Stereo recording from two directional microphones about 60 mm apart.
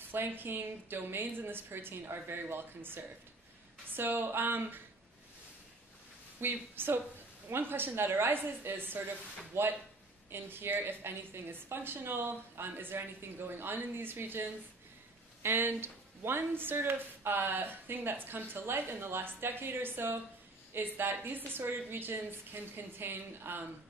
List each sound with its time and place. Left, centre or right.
0.1 s speech: right
6.4 s speech: right